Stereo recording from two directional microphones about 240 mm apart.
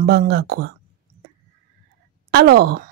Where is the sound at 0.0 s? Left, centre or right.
Right.